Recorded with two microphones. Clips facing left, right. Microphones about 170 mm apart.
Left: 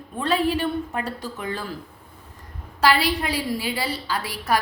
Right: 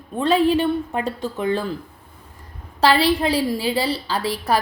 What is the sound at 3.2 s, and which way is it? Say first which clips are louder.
A woman's voice: right 6 dB; 30° right (ahead or behind).